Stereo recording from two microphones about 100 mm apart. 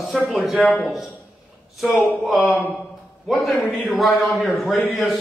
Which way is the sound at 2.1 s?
Centre (ahead or behind).